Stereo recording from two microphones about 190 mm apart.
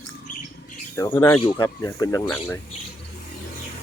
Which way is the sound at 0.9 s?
15° left (ahead or behind).